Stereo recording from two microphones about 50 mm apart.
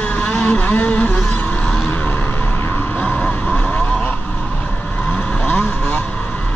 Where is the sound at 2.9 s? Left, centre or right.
Left.